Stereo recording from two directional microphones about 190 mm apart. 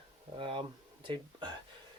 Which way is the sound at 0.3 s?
25° right (ahead or behind).